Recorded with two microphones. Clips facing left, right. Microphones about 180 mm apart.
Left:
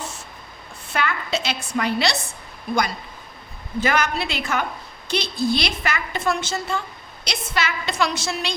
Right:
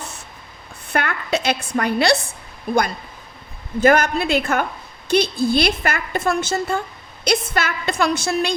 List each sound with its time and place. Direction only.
0.9 s a woman's voice: 55° right (ahead or behind)
3.8 s a woman's voice: 50° right (ahead or behind)